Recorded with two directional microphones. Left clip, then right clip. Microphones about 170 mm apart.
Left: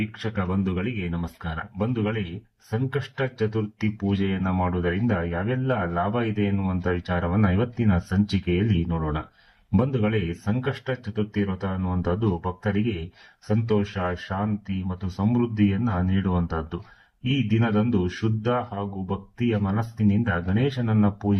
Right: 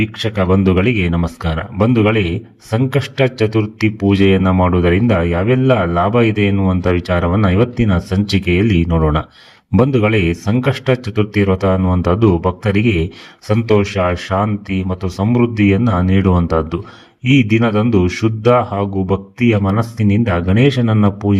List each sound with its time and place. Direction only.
0.0 s speech: 35° right (ahead or behind)